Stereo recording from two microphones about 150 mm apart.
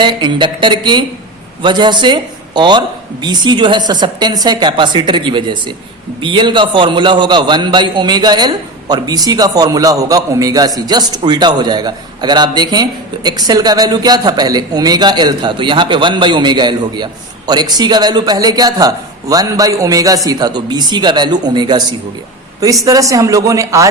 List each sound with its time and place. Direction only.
0.0 s a man's voice: 30° right (ahead or behind)